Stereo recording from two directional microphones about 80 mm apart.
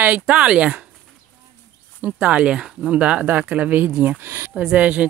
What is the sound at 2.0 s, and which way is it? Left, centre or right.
Speech, centre.